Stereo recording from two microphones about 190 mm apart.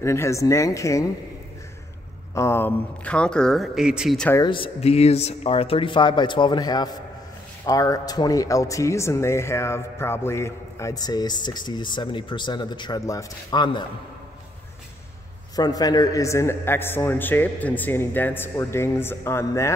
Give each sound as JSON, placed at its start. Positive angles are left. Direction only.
{"t": 0.0, "sound": "a man's voice", "side_deg": 15}
{"t": 2.3, "sound": "speech", "side_deg": 15}
{"t": 4.3, "sound": "speech", "side_deg": 20}
{"t": 15.5, "sound": "a man's voice", "side_deg": 20}